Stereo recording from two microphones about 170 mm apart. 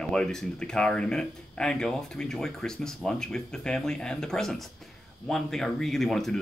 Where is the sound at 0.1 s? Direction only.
5° left (ahead or behind).